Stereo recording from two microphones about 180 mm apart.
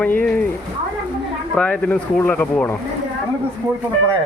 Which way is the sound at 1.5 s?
10° left (ahead or behind).